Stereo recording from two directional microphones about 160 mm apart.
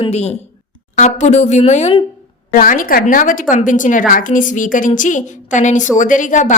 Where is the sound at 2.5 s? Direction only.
60° left (ahead or behind).